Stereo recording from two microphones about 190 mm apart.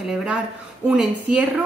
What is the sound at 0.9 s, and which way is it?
Speech, 5° right (ahead or behind).